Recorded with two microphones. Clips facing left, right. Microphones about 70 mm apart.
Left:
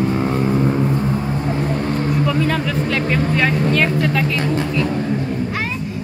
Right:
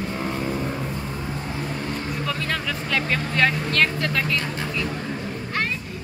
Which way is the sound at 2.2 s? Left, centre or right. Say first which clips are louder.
Left 8 dB; centre.